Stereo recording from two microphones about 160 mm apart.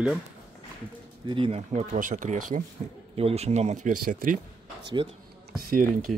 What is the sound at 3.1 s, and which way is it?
Speech, 40° right (ahead or behind).